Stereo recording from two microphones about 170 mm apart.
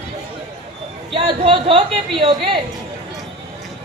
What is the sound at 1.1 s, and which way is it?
A woman's voice, 30° right (ahead or behind).